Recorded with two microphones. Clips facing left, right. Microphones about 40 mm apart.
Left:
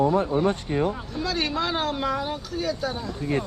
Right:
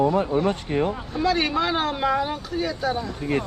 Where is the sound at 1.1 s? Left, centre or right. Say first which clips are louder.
Right 5 dB; centre.